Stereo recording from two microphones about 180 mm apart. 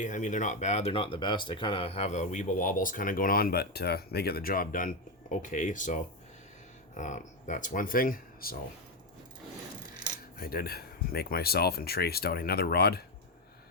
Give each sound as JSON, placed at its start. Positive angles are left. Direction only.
{"t": 0.0, "sound": "speech", "side_deg": 45}
{"t": 10.3, "sound": "speech", "side_deg": 55}